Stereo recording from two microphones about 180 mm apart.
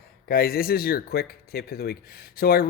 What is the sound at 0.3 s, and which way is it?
Speech, 55° left (ahead or behind).